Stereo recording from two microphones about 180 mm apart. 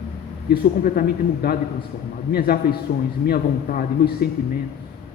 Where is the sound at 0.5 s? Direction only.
55° left (ahead or behind).